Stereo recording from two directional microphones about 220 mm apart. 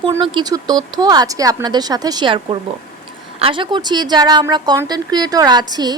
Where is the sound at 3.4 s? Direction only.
25° right (ahead or behind).